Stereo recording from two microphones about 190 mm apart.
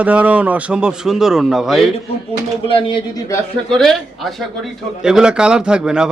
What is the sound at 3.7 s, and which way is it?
A man's voice, centre (ahead or behind).